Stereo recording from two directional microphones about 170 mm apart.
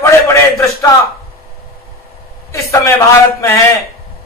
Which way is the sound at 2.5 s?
20° left (ahead or behind).